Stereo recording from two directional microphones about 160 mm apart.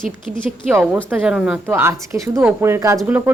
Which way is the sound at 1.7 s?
15° right (ahead or behind).